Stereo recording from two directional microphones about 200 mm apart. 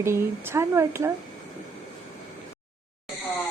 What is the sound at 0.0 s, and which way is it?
A woman's voice, 10° right (ahead or behind).